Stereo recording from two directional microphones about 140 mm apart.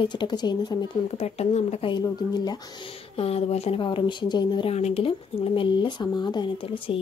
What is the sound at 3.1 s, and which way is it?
Speech, 45° left (ahead or behind).